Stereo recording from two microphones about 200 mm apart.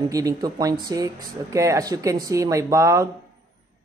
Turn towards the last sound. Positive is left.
turn(degrees=-15)  # may be behind; listen again after turning